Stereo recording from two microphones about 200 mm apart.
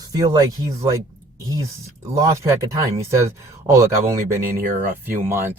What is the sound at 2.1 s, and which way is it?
Speech, 15° right (ahead or behind).